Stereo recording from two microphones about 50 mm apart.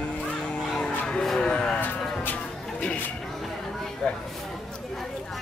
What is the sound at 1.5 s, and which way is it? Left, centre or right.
Speech, centre.